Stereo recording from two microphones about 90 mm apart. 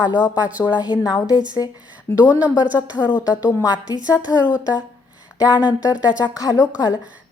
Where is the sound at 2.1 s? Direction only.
15° right (ahead or behind).